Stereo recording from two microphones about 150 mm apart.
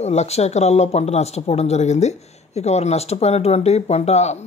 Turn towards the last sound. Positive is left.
turn(degrees=45)  # may be behind; listen again after turning